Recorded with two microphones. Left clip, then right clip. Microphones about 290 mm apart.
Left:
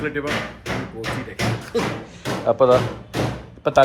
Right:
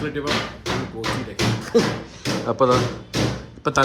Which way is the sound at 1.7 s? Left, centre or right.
Right.